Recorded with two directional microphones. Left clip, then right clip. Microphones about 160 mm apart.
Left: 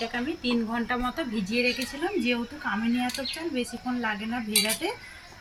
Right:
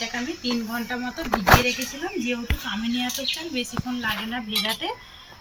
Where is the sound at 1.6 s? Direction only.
Centre (ahead or behind).